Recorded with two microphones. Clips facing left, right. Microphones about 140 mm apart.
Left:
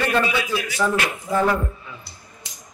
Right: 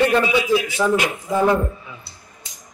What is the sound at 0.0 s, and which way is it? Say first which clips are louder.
Speech: right 4 dB; 20° right (ahead or behind).